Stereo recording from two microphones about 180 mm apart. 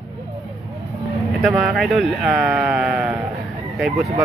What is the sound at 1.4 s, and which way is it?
Sheep, centre (ahead or behind).